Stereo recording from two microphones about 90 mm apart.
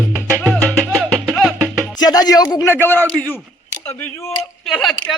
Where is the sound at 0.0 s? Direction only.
20° right (ahead or behind).